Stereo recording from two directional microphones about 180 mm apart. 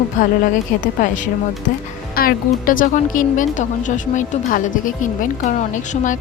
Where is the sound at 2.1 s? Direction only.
55° left (ahead or behind).